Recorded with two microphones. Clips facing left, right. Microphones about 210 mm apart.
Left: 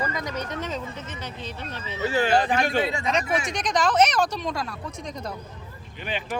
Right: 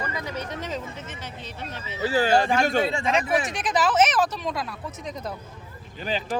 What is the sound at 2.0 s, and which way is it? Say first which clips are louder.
Speech: right 1 dB; 35° right (ahead or behind).